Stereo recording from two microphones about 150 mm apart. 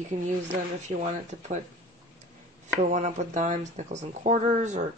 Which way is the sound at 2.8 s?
50° right (ahead or behind).